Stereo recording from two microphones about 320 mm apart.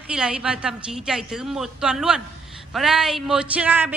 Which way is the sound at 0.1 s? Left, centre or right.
Centre.